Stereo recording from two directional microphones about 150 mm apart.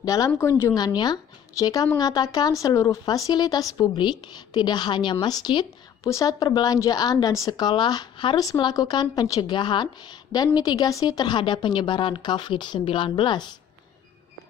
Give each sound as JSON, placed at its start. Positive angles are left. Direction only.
{"t": 0.0, "sound": "a woman's voice", "side_deg": 25}